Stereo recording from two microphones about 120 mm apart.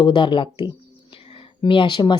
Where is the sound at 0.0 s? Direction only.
40° left (ahead or behind).